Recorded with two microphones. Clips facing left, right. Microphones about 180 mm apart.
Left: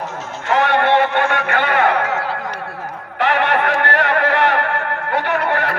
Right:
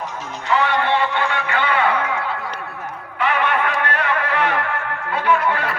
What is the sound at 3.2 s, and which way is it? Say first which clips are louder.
Music: left 3 dB; 70° left (ahead or behind).